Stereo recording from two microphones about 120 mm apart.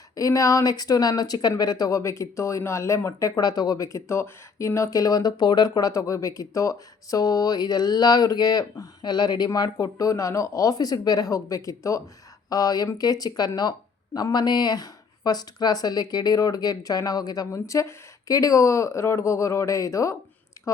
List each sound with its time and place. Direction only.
0.2 s speech: 25° left (ahead or behind)